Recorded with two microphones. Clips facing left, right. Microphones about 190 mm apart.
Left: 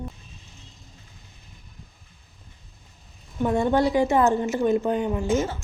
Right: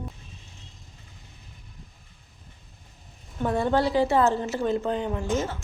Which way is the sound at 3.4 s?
15° left (ahead or behind).